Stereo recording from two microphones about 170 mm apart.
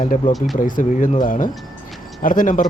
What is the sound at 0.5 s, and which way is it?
Speech, 50° left (ahead or behind).